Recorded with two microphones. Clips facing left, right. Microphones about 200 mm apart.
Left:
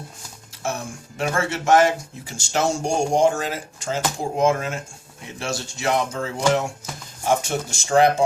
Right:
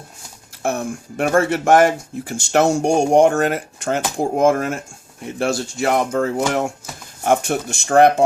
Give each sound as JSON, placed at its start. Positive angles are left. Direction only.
{"t": 0.6, "sound": "speech", "side_deg": -55}